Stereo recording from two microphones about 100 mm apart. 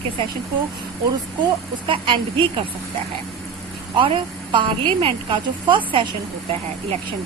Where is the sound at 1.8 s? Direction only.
55° right (ahead or behind).